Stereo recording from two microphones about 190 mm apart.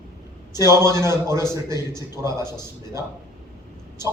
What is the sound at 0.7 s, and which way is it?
A man's voice, 15° right (ahead or behind).